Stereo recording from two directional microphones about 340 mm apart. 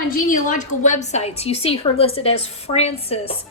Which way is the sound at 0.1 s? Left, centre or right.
Left.